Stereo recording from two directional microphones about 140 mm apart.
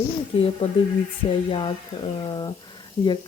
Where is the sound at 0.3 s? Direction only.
40° left (ahead or behind).